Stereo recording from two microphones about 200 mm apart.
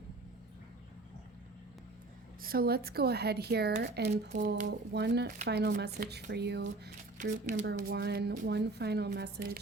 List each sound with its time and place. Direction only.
2.4 s speech: 50° right (ahead or behind)
4.1 s speech: 40° right (ahead or behind); by 6.9 s 60° right (ahead or behind)
7.2 s speech: 40° right (ahead or behind)
7.9 s speech: 55° right (ahead or behind)